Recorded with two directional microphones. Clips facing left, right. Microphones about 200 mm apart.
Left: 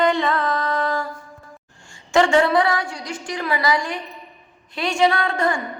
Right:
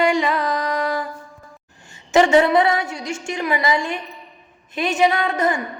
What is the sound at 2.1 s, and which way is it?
A woman's voice, 20° right (ahead or behind).